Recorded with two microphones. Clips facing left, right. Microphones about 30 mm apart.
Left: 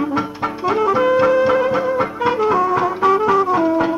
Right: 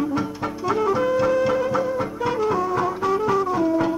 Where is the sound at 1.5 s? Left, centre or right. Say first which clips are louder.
Left 5 dB; left.